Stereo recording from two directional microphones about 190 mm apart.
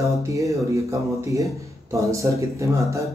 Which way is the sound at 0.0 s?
15° right (ahead or behind).